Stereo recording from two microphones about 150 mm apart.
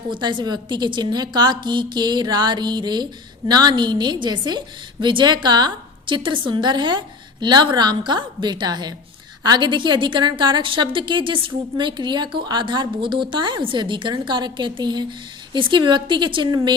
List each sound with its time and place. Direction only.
0.1 s a woman's voice: 30° right (ahead or behind)